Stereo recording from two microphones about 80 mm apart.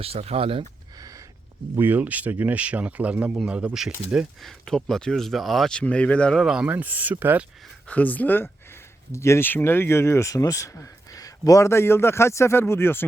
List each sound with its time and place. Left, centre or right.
1.7 s speech: right
4.4 s speech: centre
6.3 s speech: centre
6.7 s speech: centre
7.9 s speech: centre
9.1 s speech: left